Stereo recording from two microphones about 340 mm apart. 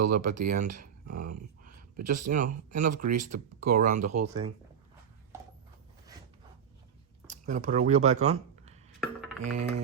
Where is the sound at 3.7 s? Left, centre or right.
Right.